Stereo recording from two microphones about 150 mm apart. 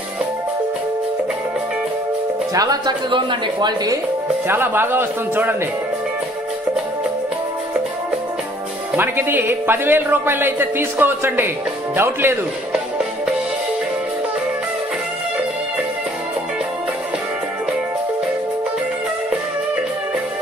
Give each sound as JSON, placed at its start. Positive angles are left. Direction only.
{"t": 2.5, "sound": "a woman's voice", "side_deg": -25}
{"t": 4.5, "sound": "a man's voice", "side_deg": -15}
{"t": 8.9, "sound": "a man's voice", "side_deg": -15}